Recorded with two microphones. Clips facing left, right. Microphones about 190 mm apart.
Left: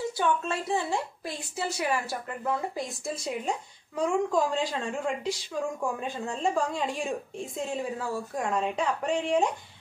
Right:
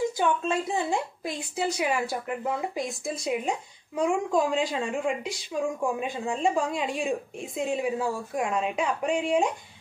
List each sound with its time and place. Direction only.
0.2 s a woman's voice: 15° right (ahead or behind)